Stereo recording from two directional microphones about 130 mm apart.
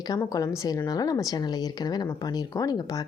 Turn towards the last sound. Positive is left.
turn(degrees=30)  # may be behind; listen again after turning